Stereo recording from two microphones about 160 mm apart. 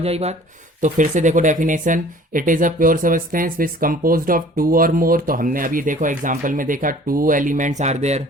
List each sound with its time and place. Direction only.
0.0 s speech: 40° right (ahead or behind)